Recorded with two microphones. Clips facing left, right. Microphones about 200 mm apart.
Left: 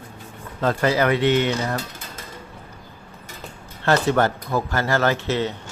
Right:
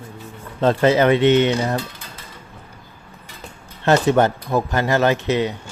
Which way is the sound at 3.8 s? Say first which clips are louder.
Right 3 dB; 20° right (ahead or behind).